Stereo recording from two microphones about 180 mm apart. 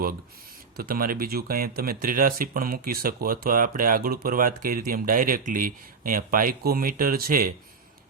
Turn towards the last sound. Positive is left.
turn(degrees=-55)  # may be behind; listen again after turning